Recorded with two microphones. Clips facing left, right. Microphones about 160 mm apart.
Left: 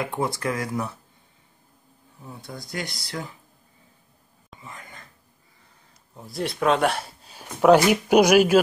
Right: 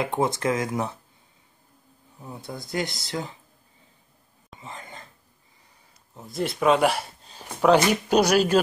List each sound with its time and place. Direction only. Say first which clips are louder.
0.0 s speech: right 2 dB; 20° right (ahead or behind)
2.2 s speech: right 2 dB; 20° right (ahead or behind)
4.6 s whispering: right 3 dB; 25° right (ahead or behind)
6.1 s speech: right 1 dB; centre (ahead or behind)